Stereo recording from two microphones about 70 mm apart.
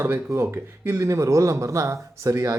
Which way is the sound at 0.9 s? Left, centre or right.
Right.